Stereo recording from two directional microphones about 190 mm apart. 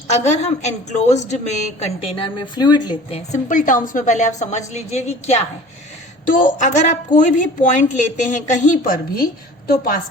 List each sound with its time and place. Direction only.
0.3 s a woman's voice: 35° left (ahead or behind)